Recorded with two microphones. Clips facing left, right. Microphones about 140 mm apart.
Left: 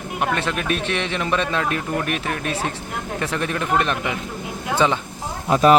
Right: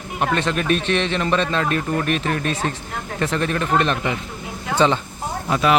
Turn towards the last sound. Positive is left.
turn(degrees=40)  # may be behind; listen again after turning